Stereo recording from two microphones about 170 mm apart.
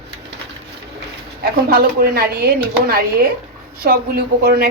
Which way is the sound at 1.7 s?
60° right (ahead or behind).